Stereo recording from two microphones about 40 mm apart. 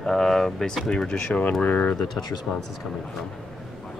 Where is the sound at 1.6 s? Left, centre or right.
Left.